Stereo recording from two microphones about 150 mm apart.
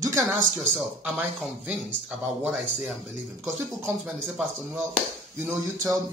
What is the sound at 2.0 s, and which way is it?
Speech, 5° right (ahead or behind).